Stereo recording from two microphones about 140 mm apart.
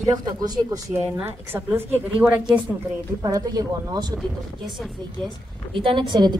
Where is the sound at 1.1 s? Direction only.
15° right (ahead or behind).